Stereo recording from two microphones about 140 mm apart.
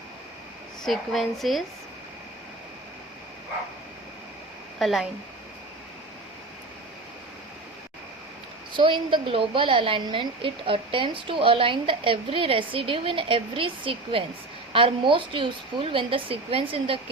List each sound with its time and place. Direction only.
0.9 s speech: centre (ahead or behind)
4.8 s speech: centre (ahead or behind)
8.7 s a woman's voice: 35° right (ahead or behind)